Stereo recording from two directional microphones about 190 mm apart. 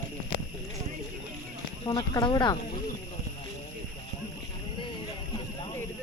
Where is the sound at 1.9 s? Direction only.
25° left (ahead or behind).